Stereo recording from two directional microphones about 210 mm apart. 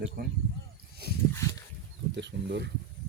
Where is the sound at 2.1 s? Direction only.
55° right (ahead or behind).